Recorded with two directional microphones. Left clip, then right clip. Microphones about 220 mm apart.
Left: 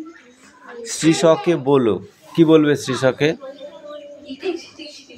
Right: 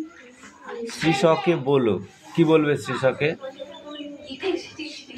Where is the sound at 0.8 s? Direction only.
20° left (ahead or behind).